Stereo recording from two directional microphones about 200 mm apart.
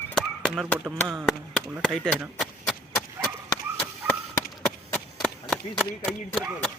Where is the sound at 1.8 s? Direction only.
5° left (ahead or behind).